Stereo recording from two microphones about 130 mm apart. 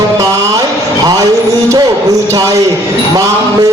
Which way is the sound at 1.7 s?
30° right (ahead or behind).